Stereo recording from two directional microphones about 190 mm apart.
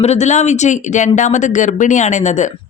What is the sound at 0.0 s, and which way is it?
Speech, 35° left (ahead or behind).